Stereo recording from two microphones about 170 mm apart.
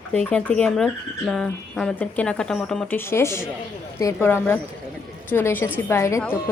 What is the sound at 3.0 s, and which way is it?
A woman's voice, 15° left (ahead or behind).